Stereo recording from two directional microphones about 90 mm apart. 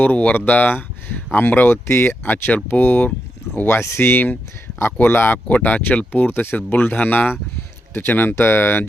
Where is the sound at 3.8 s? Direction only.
30° left (ahead or behind).